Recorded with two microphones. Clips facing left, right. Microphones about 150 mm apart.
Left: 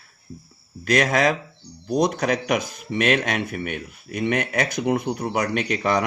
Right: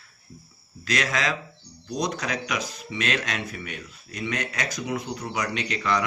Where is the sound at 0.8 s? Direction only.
55° left (ahead or behind).